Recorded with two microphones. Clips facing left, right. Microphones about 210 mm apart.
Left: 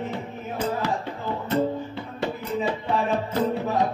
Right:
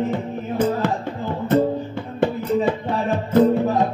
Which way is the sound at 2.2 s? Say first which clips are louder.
Right 8 dB; 50° right (ahead or behind).